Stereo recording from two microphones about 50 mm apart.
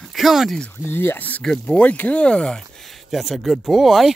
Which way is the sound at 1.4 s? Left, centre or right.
Centre.